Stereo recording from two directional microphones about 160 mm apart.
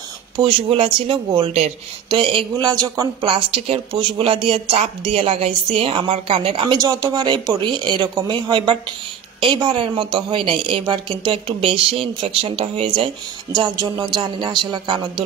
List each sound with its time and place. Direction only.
0.4 s speech: 30° right (ahead or behind)